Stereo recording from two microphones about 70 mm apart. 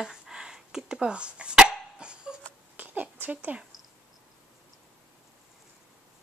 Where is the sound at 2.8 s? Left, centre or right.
Right.